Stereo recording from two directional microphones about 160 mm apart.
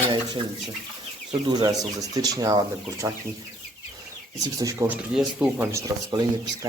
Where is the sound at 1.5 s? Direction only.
25° right (ahead or behind).